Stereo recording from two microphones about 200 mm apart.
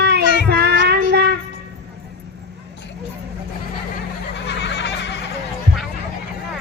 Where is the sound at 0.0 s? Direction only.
55° right (ahead or behind).